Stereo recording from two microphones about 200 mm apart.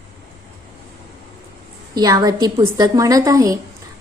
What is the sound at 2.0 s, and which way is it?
A woman's voice, 20° right (ahead or behind).